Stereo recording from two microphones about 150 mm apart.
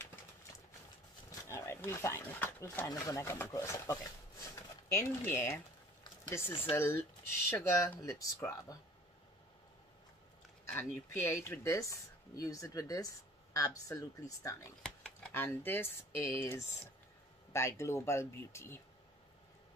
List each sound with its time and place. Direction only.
1.5 s speech: 20° left (ahead or behind)
8.0 s speech: 20° left (ahead or behind)
10.7 s speech: 15° left (ahead or behind)
14.8 s a sound: 5° left (ahead or behind)
15.4 s speech: 15° left (ahead or behind)